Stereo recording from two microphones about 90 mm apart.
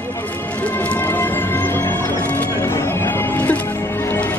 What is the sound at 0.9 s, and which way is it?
Music, 20° left (ahead or behind).